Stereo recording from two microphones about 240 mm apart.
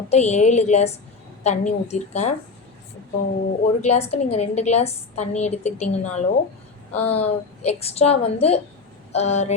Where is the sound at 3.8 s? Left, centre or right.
Left.